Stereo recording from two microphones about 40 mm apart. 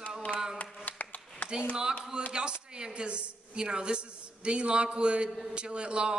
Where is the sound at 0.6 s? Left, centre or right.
Left.